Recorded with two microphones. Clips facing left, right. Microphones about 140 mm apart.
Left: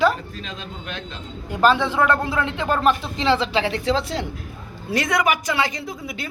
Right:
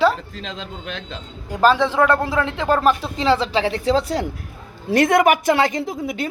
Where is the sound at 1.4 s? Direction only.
35° right (ahead or behind).